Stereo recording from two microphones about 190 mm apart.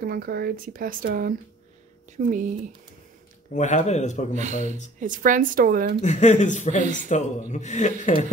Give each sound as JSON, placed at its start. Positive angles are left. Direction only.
{"t": 0.0, "sound": "speech", "side_deg": -50}
{"t": 3.5, "sound": "speech", "side_deg": 40}
{"t": 4.3, "sound": "speech", "side_deg": -40}
{"t": 6.0, "sound": "speech", "side_deg": 40}